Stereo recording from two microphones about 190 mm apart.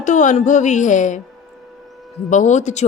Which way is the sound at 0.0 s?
40° left (ahead or behind).